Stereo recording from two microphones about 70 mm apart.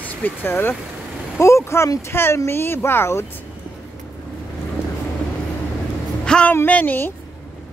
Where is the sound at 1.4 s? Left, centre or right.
Left.